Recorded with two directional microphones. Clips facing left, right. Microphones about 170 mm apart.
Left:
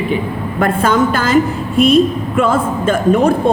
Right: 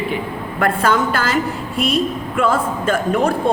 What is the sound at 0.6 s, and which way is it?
Speech, 20° left (ahead or behind).